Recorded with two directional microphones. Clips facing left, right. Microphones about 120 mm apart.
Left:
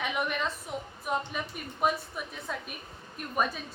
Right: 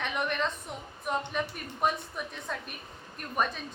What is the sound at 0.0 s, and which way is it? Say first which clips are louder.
A woman's voice: even; 5° left (ahead or behind).